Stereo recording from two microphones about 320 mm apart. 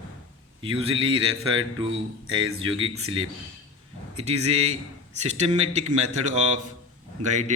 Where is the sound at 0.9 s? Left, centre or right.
Right.